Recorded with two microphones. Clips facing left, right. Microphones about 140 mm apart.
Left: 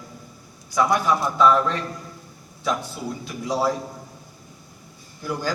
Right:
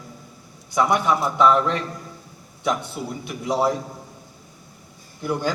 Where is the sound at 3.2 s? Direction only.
20° right (ahead or behind).